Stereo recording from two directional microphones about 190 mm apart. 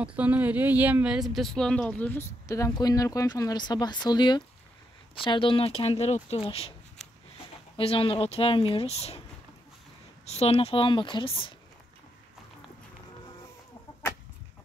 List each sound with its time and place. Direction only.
0.0 s a woman's voice: 5° right (ahead or behind); by 6.7 s 30° left (ahead or behind)
7.7 s speech: 30° left (ahead or behind)
10.2 s speech: 35° left (ahead or behind)